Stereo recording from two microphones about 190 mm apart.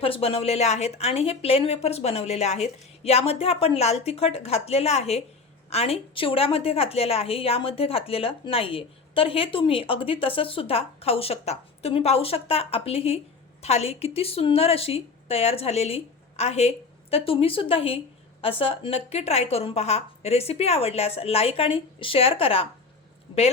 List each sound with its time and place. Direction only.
0.0 s a woman's voice: 30° left (ahead or behind)